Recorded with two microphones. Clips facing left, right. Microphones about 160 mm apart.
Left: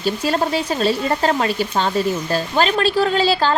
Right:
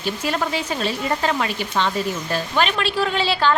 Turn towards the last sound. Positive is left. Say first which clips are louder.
# left 3 dB
turn(degrees=40)  # may be behind; listen again after turning